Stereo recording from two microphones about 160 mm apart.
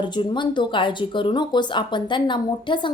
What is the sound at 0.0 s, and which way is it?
A woman's voice, 30° left (ahead or behind).